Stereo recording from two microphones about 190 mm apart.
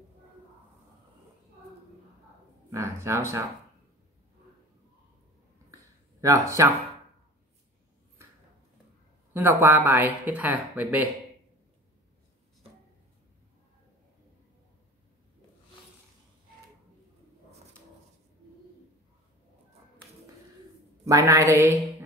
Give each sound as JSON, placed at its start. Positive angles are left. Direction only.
{"t": 2.7, "sound": "speech", "side_deg": -15}
{"t": 6.2, "sound": "speech", "side_deg": -15}
{"t": 9.3, "sound": "speech", "side_deg": -10}
{"t": 21.0, "sound": "speech", "side_deg": -15}